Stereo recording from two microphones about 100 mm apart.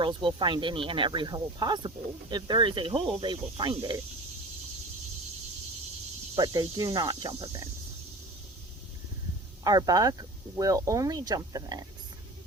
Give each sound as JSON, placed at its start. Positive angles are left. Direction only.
{"t": 0.0, "sound": "speech", "side_deg": -55}
{"t": 6.3, "sound": "speech", "side_deg": -40}
{"t": 9.6, "sound": "speech", "side_deg": -40}